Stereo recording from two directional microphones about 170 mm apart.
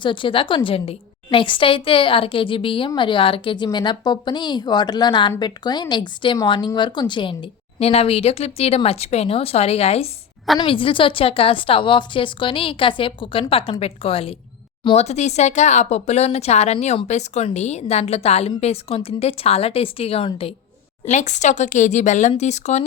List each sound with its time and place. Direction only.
0.0 s a woman's voice: 30° left (ahead or behind)
21.1 s speech: 45° left (ahead or behind)